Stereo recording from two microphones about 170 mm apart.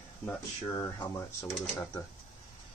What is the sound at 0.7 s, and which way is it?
Speech, 20° left (ahead or behind).